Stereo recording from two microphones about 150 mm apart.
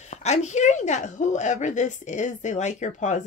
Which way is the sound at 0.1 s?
50° left (ahead or behind).